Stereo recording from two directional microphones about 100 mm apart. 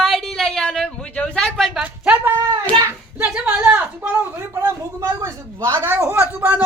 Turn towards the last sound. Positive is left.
turn(degrees=-20)  # may be behind; listen again after turning